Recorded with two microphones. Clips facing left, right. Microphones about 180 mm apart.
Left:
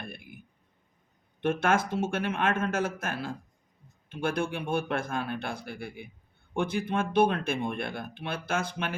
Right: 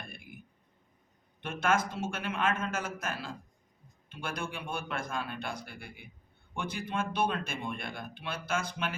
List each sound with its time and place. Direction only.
1.4 s speech: 55° left (ahead or behind)